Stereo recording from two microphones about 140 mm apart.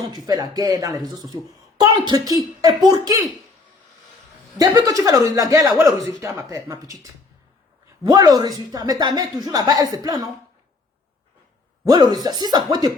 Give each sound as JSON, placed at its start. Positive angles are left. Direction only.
{"t": 0.1, "sound": "a woman's voice", "side_deg": -30}
{"t": 4.5, "sound": "a woman's voice", "side_deg": -30}
{"t": 11.9, "sound": "a woman's voice", "side_deg": -30}